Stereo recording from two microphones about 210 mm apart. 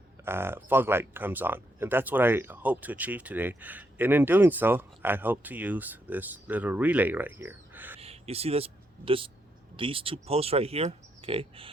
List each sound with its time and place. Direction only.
0.3 s speech: 10° right (ahead or behind)
7.9 s a sound: 30° right (ahead or behind)
9.7 s speech: 25° right (ahead or behind)